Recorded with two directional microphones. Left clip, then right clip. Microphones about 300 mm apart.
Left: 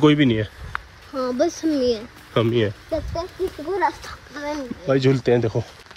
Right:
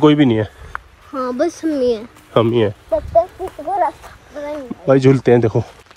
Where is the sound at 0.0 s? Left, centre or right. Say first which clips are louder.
Right 5 dB; centre.